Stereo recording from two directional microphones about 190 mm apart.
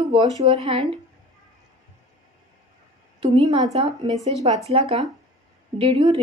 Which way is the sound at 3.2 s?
35° right (ahead or behind).